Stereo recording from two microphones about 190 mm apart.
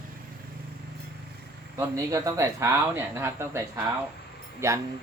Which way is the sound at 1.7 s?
15° right (ahead or behind).